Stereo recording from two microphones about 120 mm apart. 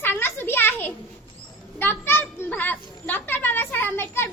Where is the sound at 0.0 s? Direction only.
20° left (ahead or behind).